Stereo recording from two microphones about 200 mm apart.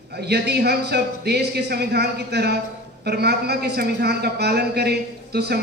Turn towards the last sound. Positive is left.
turn(degrees=-55)  # may be behind; listen again after turning